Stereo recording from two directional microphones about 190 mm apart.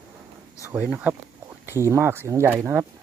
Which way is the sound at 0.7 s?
10° right (ahead or behind).